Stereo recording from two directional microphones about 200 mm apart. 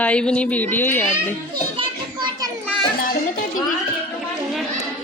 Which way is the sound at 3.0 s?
45° left (ahead or behind).